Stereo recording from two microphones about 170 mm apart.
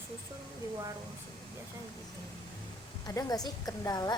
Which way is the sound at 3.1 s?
20° left (ahead or behind).